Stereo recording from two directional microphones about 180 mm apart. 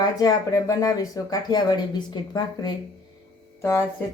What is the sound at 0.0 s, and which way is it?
Speech, 20° left (ahead or behind).